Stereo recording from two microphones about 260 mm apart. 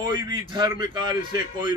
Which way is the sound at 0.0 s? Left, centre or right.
Centre.